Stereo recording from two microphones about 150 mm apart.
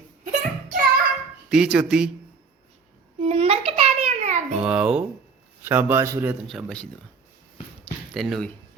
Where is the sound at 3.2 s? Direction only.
40° right (ahead or behind).